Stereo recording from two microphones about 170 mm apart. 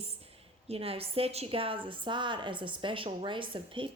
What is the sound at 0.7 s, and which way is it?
A woman's voice, 35° right (ahead or behind).